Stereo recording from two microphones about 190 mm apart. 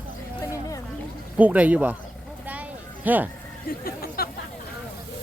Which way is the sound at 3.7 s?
50° left (ahead or behind).